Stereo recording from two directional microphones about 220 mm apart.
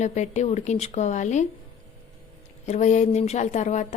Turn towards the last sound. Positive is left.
turn(degrees=30)  # may be behind; listen again after turning